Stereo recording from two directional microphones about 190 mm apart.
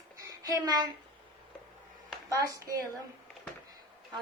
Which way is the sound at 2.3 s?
15° right (ahead or behind).